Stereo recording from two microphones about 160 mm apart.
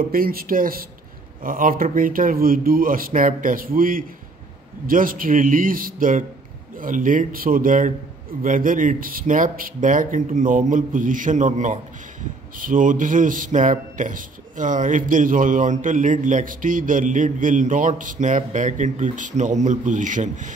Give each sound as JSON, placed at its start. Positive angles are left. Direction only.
{"t": 0.1, "sound": "a man's voice", "side_deg": -65}